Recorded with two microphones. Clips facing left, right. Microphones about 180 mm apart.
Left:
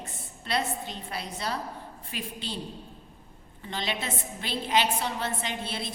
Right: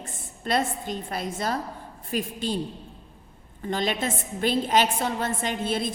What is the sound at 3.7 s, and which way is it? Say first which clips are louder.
A woman's voice: right 6 dB; 45° right (ahead or behind).